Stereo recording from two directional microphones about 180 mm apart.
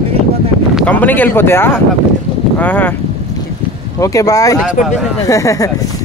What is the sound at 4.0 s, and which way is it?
Speech, 20° left (ahead or behind).